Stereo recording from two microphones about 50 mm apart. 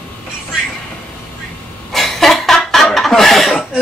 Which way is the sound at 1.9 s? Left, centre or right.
Centre.